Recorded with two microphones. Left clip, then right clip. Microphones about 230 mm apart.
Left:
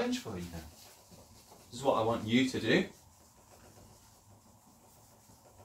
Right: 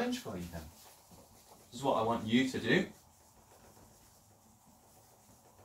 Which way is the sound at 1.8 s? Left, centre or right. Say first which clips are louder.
Left 2 dB; centre.